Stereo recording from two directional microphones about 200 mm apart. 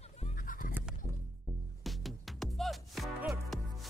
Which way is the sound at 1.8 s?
Centre (ahead or behind).